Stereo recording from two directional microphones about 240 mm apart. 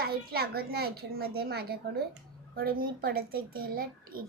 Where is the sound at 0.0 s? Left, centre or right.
Right.